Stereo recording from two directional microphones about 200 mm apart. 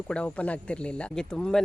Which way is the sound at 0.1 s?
5° left (ahead or behind).